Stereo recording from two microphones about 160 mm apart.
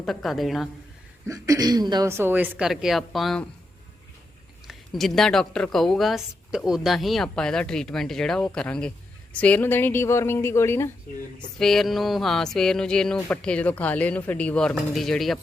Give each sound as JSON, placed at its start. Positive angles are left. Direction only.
{"t": 0.0, "sound": "speech", "side_deg": 0}
{"t": 1.3, "sound": "speech", "side_deg": -20}
{"t": 4.6, "sound": "speech", "side_deg": 0}
{"t": 11.3, "sound": "speech", "side_deg": 5}